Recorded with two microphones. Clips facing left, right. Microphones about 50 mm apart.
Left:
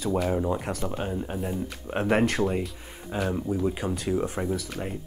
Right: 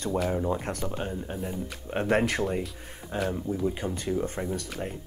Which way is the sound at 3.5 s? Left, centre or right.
Centre.